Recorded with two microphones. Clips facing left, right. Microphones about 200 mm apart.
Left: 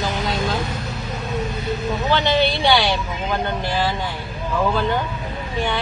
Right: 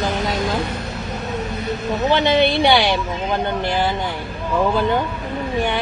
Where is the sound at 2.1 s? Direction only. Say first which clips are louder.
Right 3 dB; 20° right (ahead or behind).